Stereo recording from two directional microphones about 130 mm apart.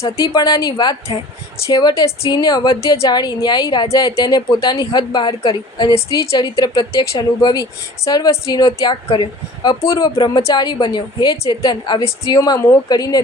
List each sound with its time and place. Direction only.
0.0 s a woman's voice: 30° left (ahead or behind)
5.9 s a woman's voice: 25° left (ahead or behind)
10.2 s a woman's voice: 35° left (ahead or behind)